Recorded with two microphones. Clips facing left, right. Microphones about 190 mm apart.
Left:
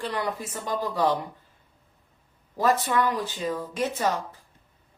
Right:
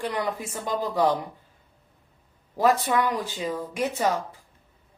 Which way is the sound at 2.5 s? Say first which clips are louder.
Right 1 dB; 15° right (ahead or behind).